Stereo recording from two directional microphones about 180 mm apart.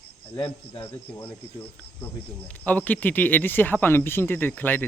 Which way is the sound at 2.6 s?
10° left (ahead or behind).